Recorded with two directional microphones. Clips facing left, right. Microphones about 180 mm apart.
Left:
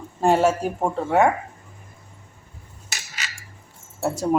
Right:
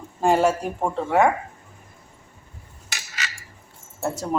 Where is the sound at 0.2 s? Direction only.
Centre (ahead or behind).